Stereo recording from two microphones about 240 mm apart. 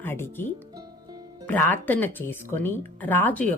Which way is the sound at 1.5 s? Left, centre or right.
Centre.